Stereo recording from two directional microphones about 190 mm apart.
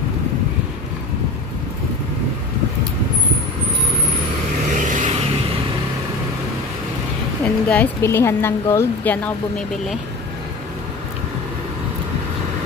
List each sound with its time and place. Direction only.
4.7 s vehicle: 40° right (ahead or behind)
7.4 s a woman's voice: 10° left (ahead or behind)